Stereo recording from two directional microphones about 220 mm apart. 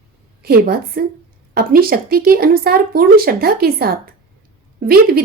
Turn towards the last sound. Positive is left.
turn(degrees=-45)  # may be behind; listen again after turning